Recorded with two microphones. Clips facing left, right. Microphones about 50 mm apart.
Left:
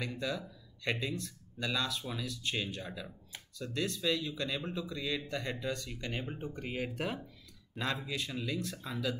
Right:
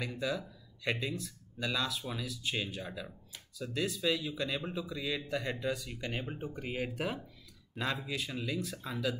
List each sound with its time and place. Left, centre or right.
0.2 s speech: centre